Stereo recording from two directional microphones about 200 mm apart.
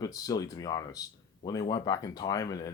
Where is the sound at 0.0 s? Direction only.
20° left (ahead or behind).